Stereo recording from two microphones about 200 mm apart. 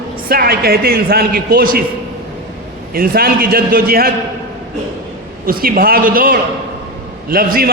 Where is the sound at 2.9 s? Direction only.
50° right (ahead or behind).